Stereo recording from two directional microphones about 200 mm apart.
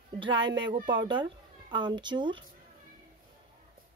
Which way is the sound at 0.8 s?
25° right (ahead or behind).